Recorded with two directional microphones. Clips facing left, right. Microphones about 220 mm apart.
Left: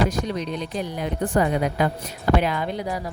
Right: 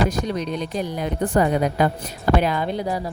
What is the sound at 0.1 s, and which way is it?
A woman's voice, 45° right (ahead or behind).